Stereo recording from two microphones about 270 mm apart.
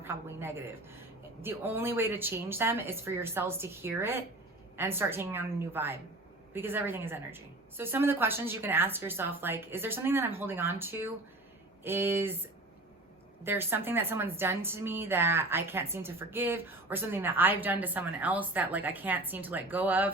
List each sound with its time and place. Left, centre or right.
0.0 s a woman's voice: centre
13.4 s a woman's voice: centre